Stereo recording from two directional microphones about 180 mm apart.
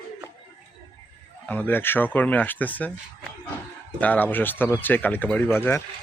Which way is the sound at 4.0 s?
10° left (ahead or behind).